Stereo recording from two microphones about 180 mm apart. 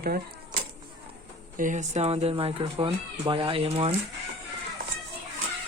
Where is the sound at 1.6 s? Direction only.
45° right (ahead or behind).